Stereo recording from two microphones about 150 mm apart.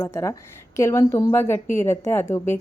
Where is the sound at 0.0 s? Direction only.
20° left (ahead or behind).